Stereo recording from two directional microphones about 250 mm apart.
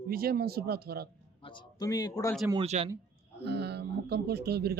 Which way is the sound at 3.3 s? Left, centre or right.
Right.